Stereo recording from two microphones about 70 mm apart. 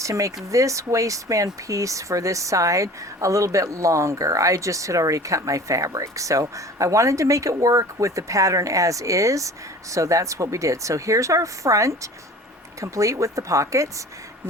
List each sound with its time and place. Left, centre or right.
0.0 s speech: right